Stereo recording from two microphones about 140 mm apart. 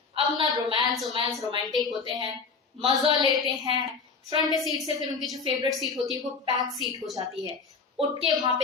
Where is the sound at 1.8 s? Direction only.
30° right (ahead or behind).